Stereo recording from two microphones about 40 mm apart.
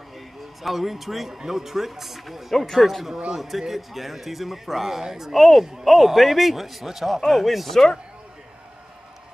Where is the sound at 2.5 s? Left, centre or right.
Centre.